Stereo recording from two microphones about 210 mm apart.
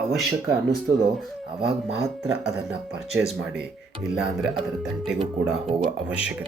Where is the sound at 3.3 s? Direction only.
5° right (ahead or behind).